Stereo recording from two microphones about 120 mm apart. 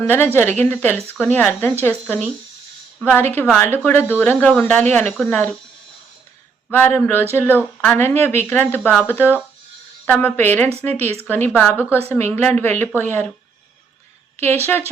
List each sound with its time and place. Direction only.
0.0 s speech: 15° left (ahead or behind)
6.7 s speech: 15° left (ahead or behind)